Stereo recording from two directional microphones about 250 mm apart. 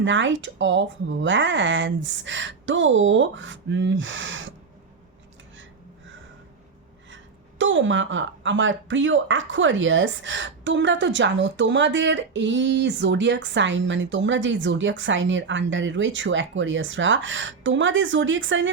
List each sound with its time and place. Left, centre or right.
0.0 s speech: right
7.6 s speech: right